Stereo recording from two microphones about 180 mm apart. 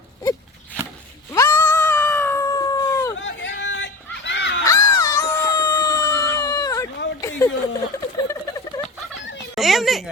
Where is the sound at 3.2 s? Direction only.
85° left.